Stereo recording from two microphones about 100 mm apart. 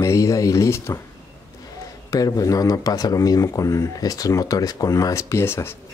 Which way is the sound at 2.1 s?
35° left (ahead or behind).